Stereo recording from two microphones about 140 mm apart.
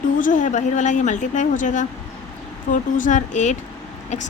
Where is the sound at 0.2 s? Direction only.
70° left (ahead or behind).